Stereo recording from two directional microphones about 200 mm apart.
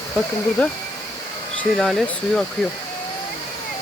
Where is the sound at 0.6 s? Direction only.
5° left (ahead or behind).